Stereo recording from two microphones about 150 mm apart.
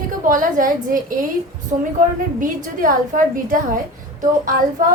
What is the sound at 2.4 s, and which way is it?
A woman's voice, 60° right (ahead or behind).